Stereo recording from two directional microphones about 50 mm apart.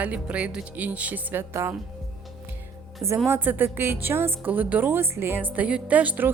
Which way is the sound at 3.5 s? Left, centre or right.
Right.